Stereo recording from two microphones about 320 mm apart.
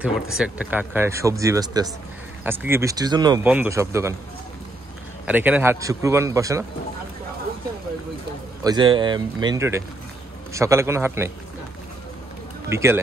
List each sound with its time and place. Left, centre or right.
0.0 s speech: centre
5.2 s speech: centre
8.6 s speech: centre
12.6 s speech: centre